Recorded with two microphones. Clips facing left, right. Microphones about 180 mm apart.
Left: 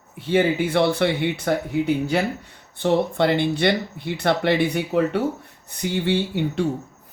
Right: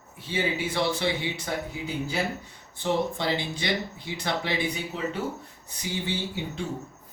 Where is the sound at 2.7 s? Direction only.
65° left (ahead or behind).